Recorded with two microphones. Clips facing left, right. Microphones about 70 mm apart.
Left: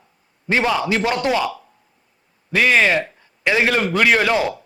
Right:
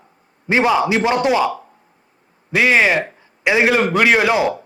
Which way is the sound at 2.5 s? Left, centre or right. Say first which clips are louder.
Right 1 dB; centre.